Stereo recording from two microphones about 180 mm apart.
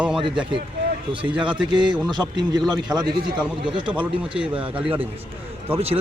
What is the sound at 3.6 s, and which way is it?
Speech, 25° right (ahead or behind).